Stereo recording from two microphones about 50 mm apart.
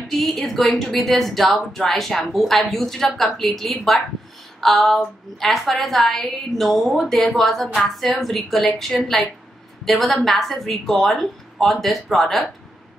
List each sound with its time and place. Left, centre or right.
0.2 s a woman's voice: centre